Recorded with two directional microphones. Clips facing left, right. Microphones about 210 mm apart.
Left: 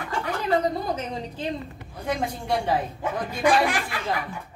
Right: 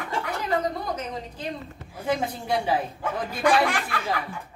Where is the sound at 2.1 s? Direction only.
5° right (ahead or behind).